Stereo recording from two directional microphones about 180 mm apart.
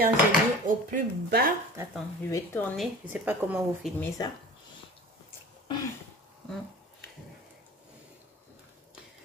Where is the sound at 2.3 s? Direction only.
10° left (ahead or behind).